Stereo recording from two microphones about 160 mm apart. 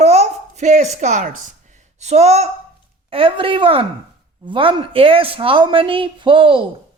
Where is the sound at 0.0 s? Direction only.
45° right (ahead or behind).